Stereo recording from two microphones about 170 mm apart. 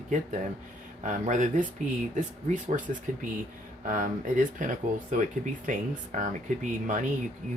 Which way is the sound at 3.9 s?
50° right (ahead or behind).